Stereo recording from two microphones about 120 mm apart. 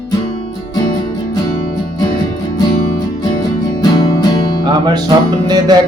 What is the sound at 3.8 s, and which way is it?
Music, 35° left (ahead or behind).